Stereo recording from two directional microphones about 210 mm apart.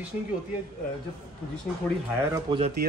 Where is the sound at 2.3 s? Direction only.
25° right (ahead or behind).